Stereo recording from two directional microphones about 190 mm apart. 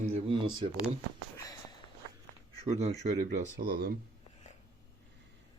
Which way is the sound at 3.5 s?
55° right (ahead or behind).